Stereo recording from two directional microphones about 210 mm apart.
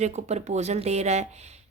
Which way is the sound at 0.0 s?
30° right (ahead or behind).